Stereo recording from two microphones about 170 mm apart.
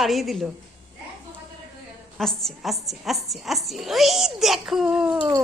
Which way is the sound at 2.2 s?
Centre (ahead or behind).